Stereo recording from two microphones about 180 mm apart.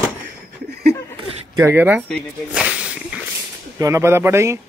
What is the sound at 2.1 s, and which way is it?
Snake, 5° right (ahead or behind).